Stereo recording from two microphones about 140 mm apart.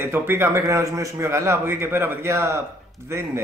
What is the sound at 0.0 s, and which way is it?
A man's voice, 15° right (ahead or behind).